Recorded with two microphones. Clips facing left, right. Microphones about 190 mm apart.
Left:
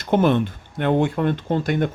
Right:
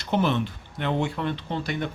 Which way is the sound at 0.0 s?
50° left (ahead or behind).